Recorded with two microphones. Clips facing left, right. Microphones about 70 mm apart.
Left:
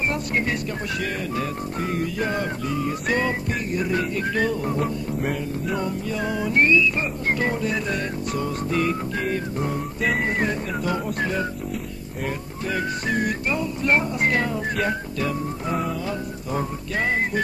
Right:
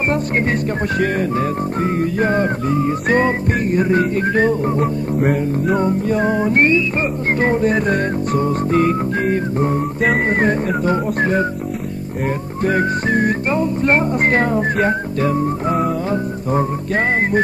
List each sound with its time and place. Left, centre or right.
0.1 s music: right
5.2 s music: right
5.8 s music: right
12.6 s music: right